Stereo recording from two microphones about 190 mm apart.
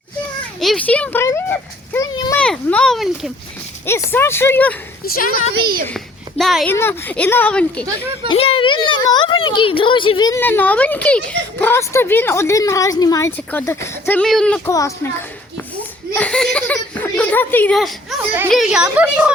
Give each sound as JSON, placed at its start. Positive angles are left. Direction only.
{"t": 0.6, "sound": "a child's voice", "side_deg": 5}
{"t": 4.1, "sound": "a child's voice", "side_deg": 10}
{"t": 5.0, "sound": "a woman's voice", "side_deg": 50}
{"t": 5.3, "sound": "speech", "side_deg": -50}
{"t": 6.3, "sound": "speech", "side_deg": 0}
{"t": 6.7, "sound": "a child's voice", "side_deg": 10}
{"t": 8.3, "sound": "a child's voice", "side_deg": 30}
{"t": 14.7, "sound": "a child's voice", "side_deg": 15}
{"t": 16.1, "sound": "speech", "side_deg": 5}